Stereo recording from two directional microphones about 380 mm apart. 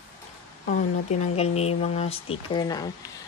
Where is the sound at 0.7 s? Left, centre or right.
Centre.